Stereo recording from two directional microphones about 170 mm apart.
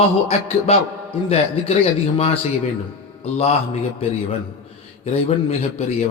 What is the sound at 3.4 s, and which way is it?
Speech, 40° left (ahead or behind).